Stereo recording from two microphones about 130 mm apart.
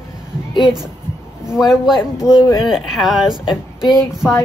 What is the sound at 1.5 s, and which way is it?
Speech, 5° right (ahead or behind).